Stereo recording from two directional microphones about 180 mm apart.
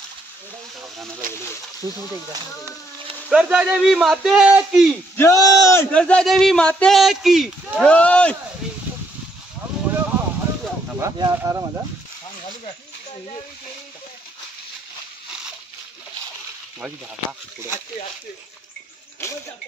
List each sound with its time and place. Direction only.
1.2 s speech: 50° right (ahead or behind)
3.3 s speech: 5° right (ahead or behind)
5.1 s speech: 15° left (ahead or behind)
11.0 s speech: 20° right (ahead or behind)
16.8 s speech: 5° right (ahead or behind)